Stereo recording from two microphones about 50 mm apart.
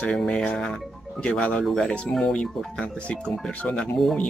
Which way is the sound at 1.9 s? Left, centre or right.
Left.